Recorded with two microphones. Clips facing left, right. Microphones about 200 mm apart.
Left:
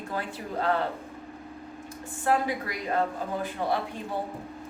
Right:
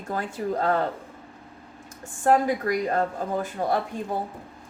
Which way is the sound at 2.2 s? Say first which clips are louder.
Right 5 dB; 45° right (ahead or behind).